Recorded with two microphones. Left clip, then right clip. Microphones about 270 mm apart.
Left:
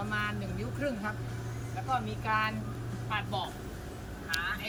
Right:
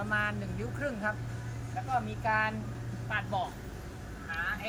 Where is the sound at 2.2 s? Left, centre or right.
Centre.